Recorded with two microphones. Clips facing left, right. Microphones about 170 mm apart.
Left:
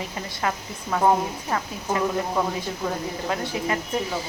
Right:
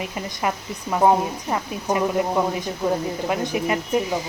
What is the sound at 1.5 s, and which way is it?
Speech, 15° right (ahead or behind).